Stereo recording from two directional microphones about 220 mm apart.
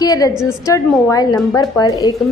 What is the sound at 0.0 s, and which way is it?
A woman's voice, 15° left (ahead or behind).